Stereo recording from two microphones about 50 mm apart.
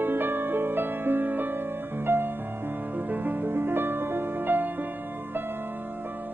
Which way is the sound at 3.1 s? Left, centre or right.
Right.